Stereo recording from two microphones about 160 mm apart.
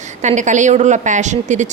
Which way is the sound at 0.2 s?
50° right (ahead or behind).